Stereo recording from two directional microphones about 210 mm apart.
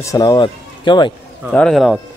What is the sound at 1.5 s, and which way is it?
Speech, centre (ahead or behind).